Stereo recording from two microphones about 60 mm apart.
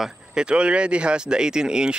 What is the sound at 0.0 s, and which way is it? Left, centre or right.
Speech, centre.